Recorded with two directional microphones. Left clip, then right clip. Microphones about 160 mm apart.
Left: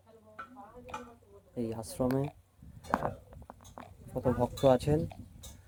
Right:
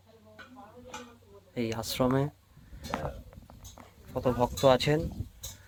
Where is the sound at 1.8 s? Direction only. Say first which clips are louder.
Right 5 dB; 10° left (ahead or behind).